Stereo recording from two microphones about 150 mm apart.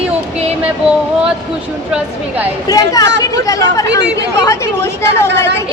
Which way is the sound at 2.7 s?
25° left (ahead or behind).